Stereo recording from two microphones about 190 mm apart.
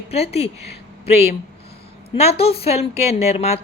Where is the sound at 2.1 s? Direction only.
30° left (ahead or behind).